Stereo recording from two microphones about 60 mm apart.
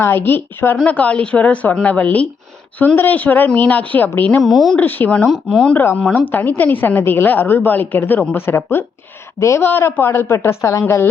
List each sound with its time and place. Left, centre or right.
0.0 s a woman's voice: left
0.9 s a woman's voice: left
4.4 s speech: centre
4.8 s speech: left
5.1 s speech: centre
6.1 s a woman's voice: left
9.4 s speech: left
9.6 s a woman's voice: left